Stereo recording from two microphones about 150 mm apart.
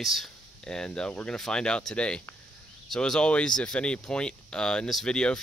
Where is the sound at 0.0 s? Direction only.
Centre (ahead or behind).